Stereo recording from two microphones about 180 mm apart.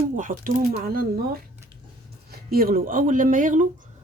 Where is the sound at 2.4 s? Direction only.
55° right (ahead or behind).